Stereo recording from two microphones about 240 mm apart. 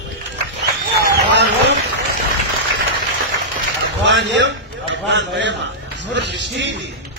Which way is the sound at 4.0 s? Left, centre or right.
Right.